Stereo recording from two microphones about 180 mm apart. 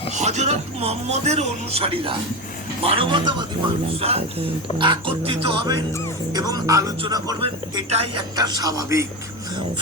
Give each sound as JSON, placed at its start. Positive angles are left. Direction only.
{"t": 0.1, "sound": "a man's voice", "side_deg": -40}